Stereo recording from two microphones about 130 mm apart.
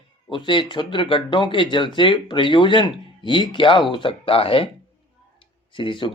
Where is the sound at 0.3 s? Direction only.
40° left (ahead or behind).